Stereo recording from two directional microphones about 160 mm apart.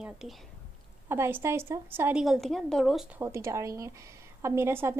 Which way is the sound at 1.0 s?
15° right (ahead or behind).